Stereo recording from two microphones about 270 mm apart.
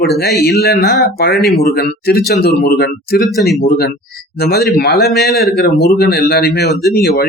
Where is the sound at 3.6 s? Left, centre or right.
Left.